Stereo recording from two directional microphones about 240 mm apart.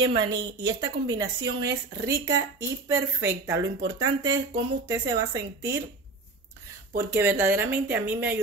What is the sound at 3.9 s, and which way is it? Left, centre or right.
Speech, right.